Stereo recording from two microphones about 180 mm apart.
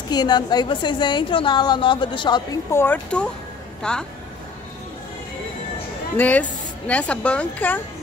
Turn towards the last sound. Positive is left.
turn(degrees=10)  # may be behind; listen again after turning